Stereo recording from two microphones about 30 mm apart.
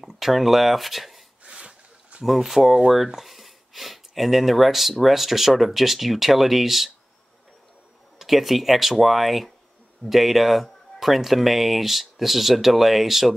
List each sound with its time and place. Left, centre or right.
0.0 s speech: centre
1.5 s a sound: right
2.2 s speech: centre
8.2 s speech: centre